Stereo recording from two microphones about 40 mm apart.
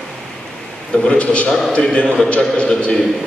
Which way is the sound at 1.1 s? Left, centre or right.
Left.